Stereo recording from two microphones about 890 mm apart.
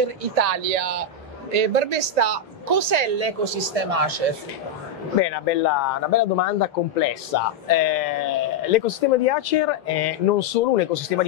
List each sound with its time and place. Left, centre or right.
0.0 s a woman's voice: right
5.2 s speech: left